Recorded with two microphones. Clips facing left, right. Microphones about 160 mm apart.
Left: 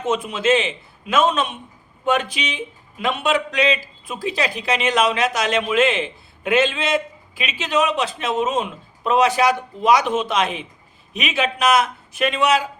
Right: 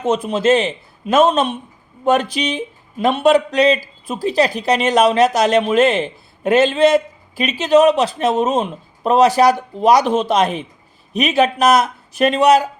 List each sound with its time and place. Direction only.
0.0 s speech: 35° right (ahead or behind)